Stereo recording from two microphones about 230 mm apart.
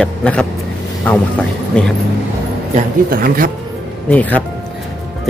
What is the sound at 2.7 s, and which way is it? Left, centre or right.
Speech, right.